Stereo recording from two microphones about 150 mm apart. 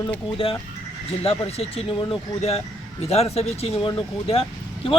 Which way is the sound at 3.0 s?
45° left (ahead or behind).